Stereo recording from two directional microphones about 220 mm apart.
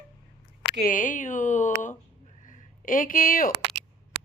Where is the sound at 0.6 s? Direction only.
50° left (ahead or behind).